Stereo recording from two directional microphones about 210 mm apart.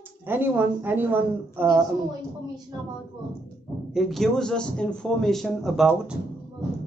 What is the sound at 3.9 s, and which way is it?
A man's voice, centre (ahead or behind).